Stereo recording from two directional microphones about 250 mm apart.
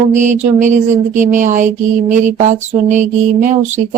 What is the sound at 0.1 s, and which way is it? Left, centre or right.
A woman's voice, right.